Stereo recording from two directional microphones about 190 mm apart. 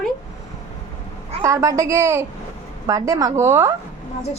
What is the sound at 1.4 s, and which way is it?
A woman's voice, 15° right (ahead or behind).